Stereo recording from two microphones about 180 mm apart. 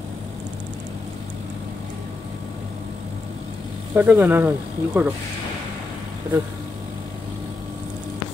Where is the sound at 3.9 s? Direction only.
10° right (ahead or behind).